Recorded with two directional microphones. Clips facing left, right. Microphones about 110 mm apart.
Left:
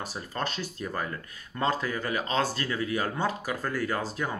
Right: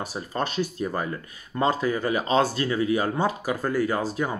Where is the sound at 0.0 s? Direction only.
15° right (ahead or behind).